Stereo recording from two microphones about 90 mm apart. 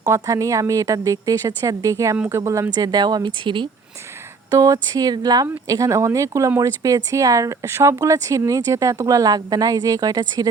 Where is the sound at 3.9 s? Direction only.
30° right (ahead or behind).